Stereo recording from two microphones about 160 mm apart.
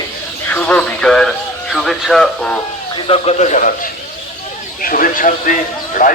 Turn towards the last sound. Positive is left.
turn(degrees=55)  # may be behind; listen again after turning